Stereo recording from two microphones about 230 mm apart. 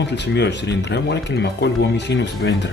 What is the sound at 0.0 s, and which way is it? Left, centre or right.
Speech, left.